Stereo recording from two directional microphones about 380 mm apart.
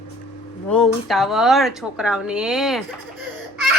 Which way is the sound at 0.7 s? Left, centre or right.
Centre.